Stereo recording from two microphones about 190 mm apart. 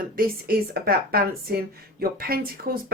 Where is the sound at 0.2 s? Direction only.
50° right (ahead or behind).